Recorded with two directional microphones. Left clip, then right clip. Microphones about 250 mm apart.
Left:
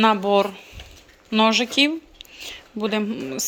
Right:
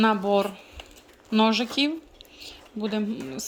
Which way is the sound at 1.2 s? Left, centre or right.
Centre.